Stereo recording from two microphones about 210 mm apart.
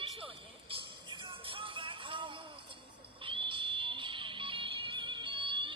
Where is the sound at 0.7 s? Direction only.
25° right (ahead or behind).